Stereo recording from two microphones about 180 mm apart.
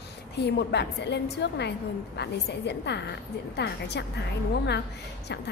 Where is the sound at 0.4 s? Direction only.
65° left (ahead or behind).